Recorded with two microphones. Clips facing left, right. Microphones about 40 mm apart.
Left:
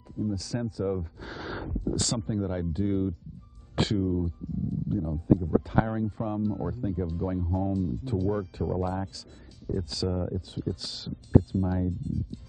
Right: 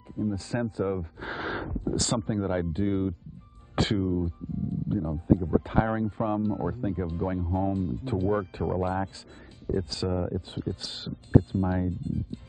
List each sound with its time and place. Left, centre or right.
0.1 s speech: right
10.3 s speech: right